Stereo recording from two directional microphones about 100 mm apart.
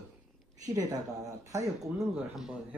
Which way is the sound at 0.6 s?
35° right (ahead or behind).